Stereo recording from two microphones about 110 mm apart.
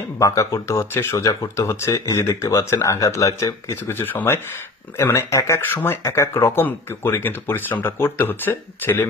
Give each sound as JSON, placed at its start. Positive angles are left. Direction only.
{"t": 0.2, "sound": "speech", "side_deg": 30}